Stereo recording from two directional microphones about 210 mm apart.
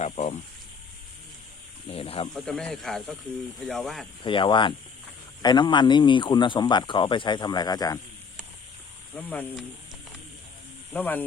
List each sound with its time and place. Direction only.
0.0 s speech: 30° left (ahead or behind)
1.9 s speech: 25° left (ahead or behind)
2.3 s speech: 5° left (ahead or behind)
4.2 s speech: 25° left (ahead or behind)
9.3 s speech: 5° left (ahead or behind)
10.9 s speech: 10° left (ahead or behind)